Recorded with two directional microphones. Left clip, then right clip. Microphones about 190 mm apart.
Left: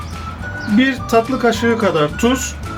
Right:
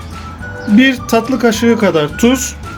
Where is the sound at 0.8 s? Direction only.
45° right (ahead or behind).